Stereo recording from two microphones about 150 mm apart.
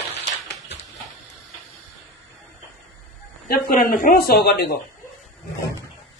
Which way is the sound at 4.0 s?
85° left.